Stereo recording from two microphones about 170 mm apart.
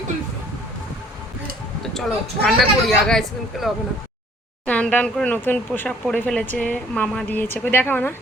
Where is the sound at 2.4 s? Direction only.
Centre (ahead or behind).